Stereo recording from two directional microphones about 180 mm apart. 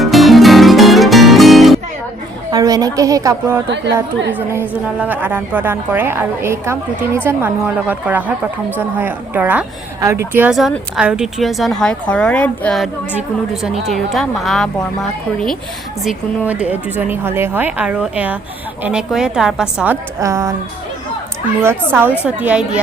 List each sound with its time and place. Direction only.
0.0 s music: centre (ahead or behind)
2.5 s a woman's voice: 20° right (ahead or behind); by 14.7 s centre (ahead or behind)
16.5 s a woman's voice: 10° right (ahead or behind)
21.6 s a woman's voice: 10° right (ahead or behind)